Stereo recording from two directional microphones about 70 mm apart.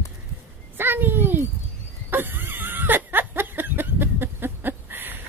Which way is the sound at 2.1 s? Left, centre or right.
Right.